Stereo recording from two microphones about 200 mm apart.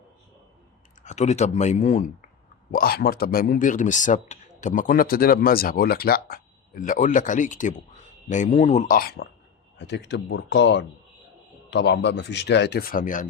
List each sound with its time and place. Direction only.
1.0 s speech: 35° left (ahead or behind)
2.7 s speech: 50° left (ahead or behind)
9.7 s a man's voice: 60° left (ahead or behind); by 13.2 s 40° left (ahead or behind)